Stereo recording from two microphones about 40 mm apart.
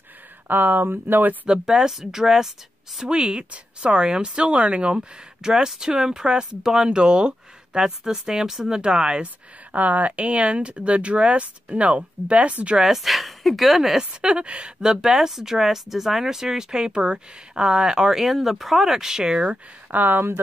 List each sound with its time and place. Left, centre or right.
0.5 s speech: right
1.5 s speech: centre
3.1 s speech: right
7.8 s speech: centre
9.7 s speech: right
12.7 s speech: centre
14.2 s speech: right
14.8 s speech: centre
16.9 s speech: right
19.9 s speech: right